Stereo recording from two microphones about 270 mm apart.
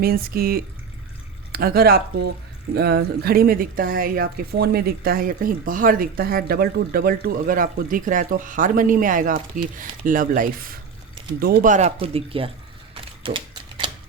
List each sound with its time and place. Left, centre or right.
0.0 s a woman's voice: right
12.9 s typewriter: centre